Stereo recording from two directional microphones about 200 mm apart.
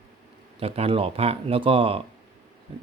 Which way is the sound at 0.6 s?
30° right (ahead or behind).